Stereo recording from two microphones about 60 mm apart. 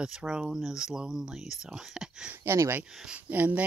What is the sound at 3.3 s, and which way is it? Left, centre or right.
Speech, right.